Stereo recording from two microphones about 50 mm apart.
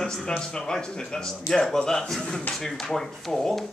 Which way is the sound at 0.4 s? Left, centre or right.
Centre.